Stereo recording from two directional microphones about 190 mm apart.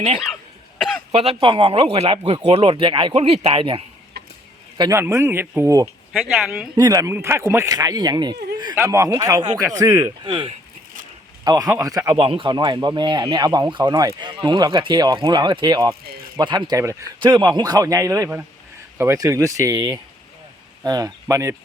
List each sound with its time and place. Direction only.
1.1 s speech: 30° right (ahead or behind)
4.1 s chicken: 55° right (ahead or behind)
4.8 s a man's voice: 15° right (ahead or behind)
6.1 s speech: 5° right (ahead or behind)
6.7 s speech: 20° right (ahead or behind)
12.1 s a man's voice: 30° right (ahead or behind)